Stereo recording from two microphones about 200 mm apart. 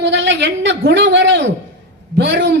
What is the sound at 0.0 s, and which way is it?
A man's voice, 65° right (ahead or behind).